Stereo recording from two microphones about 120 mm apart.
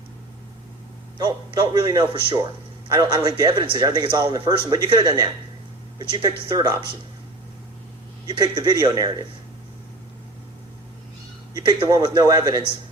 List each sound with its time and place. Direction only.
1.2 s speech: 40° right (ahead or behind)
8.3 s speech: 40° right (ahead or behind)
11.5 s speech: 40° right (ahead or behind)